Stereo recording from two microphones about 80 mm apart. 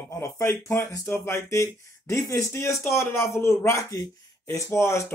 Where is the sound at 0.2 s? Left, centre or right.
Left.